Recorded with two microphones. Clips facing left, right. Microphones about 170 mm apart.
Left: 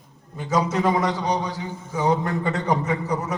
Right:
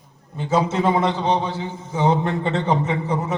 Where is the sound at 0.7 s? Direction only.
25° right (ahead or behind).